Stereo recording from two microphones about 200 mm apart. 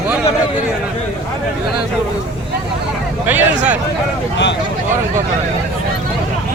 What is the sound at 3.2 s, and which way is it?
Speech, 10° right (ahead or behind).